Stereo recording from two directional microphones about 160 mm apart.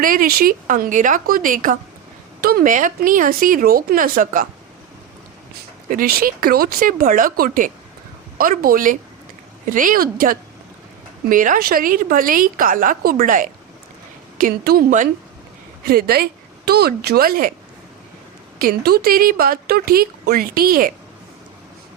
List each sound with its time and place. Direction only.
0.0 s a woman's voice: 60° right (ahead or behind)
5.9 s a woman's voice: 65° right (ahead or behind)
15.9 s speech: 75° right (ahead or behind)
18.6 s speech: 70° right (ahead or behind)